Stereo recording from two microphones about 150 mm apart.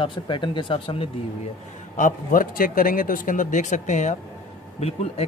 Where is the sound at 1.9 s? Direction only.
65° left (ahead or behind).